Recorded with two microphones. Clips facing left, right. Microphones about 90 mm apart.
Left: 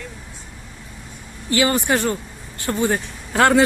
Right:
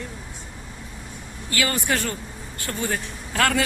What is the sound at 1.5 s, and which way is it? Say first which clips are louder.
Speech: left 6 dB; 25° left (ahead or behind).